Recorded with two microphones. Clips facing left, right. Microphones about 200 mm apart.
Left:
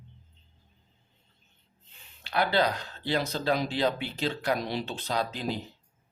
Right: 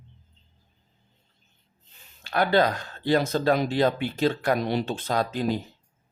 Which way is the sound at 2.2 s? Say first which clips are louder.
Right 4 dB; 45° right (ahead or behind).